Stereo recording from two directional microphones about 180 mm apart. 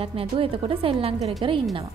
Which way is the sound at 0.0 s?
30° right (ahead or behind).